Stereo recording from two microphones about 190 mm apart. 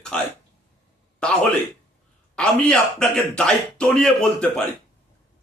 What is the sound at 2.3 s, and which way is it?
A man's voice, 5° left (ahead or behind).